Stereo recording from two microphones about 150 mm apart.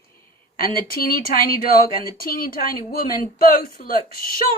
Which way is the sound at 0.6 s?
80° left.